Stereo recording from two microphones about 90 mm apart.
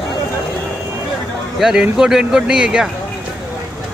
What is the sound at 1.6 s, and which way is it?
Speech, 5° right (ahead or behind).